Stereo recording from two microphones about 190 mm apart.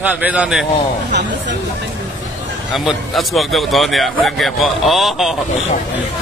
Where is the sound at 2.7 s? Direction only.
Centre (ahead or behind).